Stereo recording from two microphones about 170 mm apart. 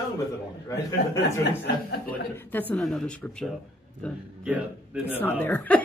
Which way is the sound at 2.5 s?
10° left (ahead or behind).